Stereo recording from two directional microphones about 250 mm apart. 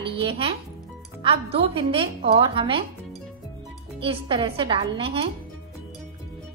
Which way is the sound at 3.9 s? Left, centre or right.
Right.